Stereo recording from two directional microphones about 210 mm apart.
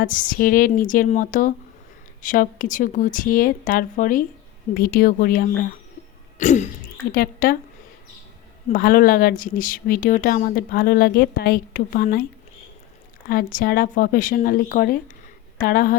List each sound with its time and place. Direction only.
0.0 s speech: 40° left (ahead or behind)
8.7 s speech: 40° left (ahead or behind)
13.2 s speech: 45° left (ahead or behind)